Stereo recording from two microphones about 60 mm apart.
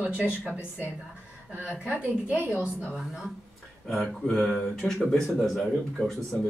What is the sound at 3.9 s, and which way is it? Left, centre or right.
Speech, centre.